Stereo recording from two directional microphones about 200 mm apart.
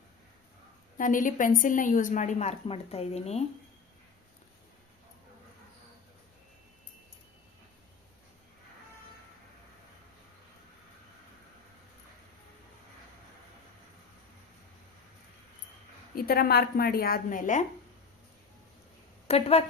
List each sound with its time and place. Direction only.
0.9 s a woman's voice: 40° left (ahead or behind)
16.1 s a woman's voice: 50° left (ahead or behind)
19.3 s a woman's voice: 30° left (ahead or behind)